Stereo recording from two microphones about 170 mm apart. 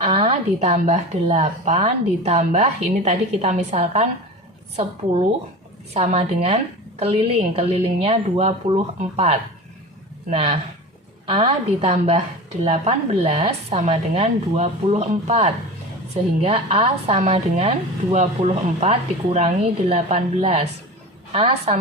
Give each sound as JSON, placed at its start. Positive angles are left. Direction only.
{"t": 0.0, "sound": "speech", "side_deg": -30}
{"t": 5.9, "sound": "speech", "side_deg": -40}